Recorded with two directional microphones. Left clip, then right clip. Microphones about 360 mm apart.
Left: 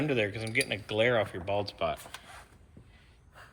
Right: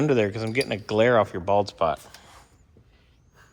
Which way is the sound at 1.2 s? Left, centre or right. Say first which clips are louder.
Right 9 dB; centre.